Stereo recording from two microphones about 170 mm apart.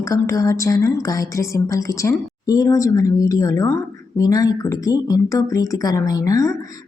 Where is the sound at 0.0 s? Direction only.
20° left (ahead or behind).